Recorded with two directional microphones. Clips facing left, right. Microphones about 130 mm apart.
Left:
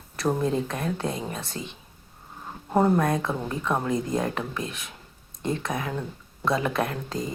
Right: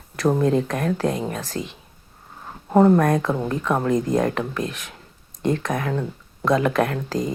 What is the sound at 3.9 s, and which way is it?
Speech, 45° right (ahead or behind).